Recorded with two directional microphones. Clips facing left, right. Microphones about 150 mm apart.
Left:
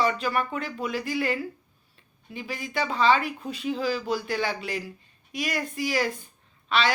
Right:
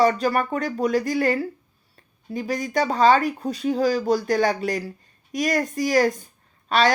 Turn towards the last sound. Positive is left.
turn(degrees=-40)  # may be behind; listen again after turning